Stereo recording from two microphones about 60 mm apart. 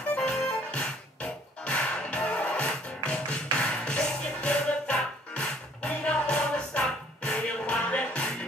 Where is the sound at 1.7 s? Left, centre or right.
Centre.